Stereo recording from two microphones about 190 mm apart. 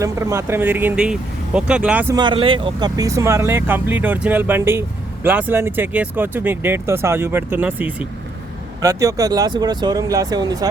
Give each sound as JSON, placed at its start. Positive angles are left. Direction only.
{"t": 0.0, "sound": "speech", "side_deg": -15}
{"t": 2.1, "sound": "speech", "side_deg": -25}